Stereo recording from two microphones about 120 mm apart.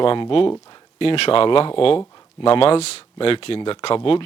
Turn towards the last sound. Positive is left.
turn(degrees=50)  # may be behind; listen again after turning